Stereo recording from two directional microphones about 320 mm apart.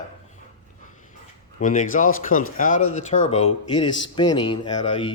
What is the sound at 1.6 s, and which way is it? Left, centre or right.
A man's voice, left.